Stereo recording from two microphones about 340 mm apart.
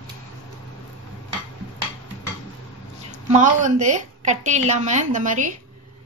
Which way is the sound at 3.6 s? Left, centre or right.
Right.